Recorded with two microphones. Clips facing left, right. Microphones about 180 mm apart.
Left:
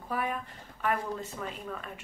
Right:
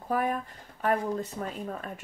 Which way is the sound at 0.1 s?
45° right (ahead or behind).